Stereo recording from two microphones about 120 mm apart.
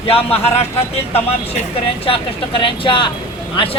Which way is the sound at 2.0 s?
45° left (ahead or behind).